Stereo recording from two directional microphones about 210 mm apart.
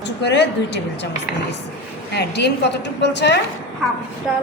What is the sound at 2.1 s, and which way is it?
A woman's voice, 55° left (ahead or behind).